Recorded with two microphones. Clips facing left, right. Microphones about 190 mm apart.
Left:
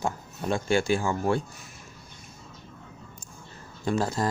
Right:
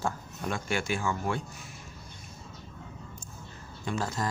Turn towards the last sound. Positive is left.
turn(degrees=35)  # may be behind; listen again after turning